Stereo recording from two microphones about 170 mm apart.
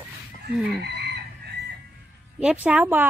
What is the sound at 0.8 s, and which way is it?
Chicken, 75° right (ahead or behind).